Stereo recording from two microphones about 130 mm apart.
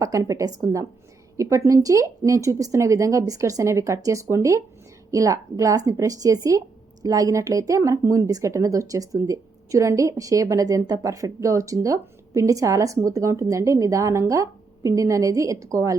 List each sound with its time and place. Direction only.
0.0 s speech: 25° right (ahead or behind)